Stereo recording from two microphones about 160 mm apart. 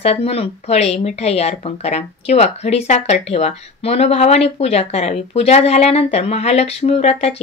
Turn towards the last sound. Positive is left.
turn(degrees=40)  # may be behind; listen again after turning